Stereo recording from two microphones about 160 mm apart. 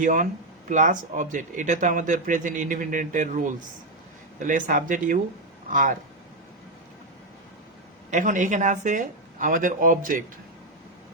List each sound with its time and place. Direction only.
0.0 s speech: 50° right (ahead or behind)
8.1 s speech: 50° right (ahead or behind)